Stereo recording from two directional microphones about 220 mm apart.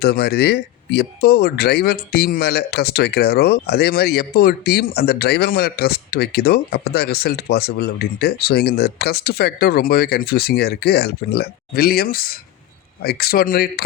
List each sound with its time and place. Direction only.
0.0 s speech: 45° left (ahead or behind)